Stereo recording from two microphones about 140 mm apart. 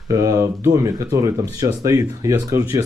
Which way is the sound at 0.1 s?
25° right (ahead or behind).